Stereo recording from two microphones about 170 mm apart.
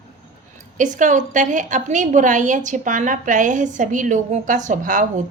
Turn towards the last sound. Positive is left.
turn(degrees=-50)  # may be behind; listen again after turning